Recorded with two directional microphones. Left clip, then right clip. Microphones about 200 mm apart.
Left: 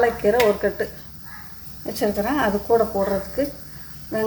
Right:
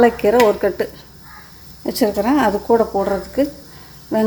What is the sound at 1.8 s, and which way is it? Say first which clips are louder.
Speech: right 5 dB; 50° right (ahead or behind).